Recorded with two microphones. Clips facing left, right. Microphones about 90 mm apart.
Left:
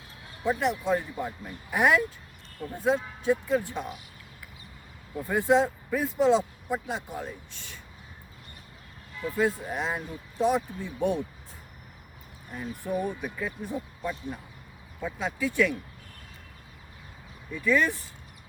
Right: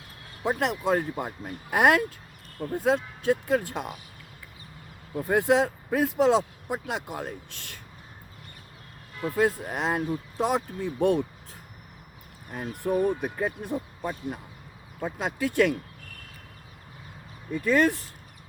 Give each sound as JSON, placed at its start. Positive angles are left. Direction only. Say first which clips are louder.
{"t": 0.4, "sound": "speech", "louder": "right 1 dB", "side_deg": -70}
{"t": 5.3, "sound": "speech", "louder": "right 1 dB", "side_deg": -70}
{"t": 9.3, "sound": "speech", "louder": "right 2 dB", "side_deg": -65}
{"t": 12.5, "sound": "speech", "louder": "right 4 dB", "side_deg": -60}
{"t": 13.3, "sound": "speech", "louder": "right 4 dB", "side_deg": -60}
{"t": 17.5, "sound": "speech", "louder": "right 2 dB", "side_deg": -55}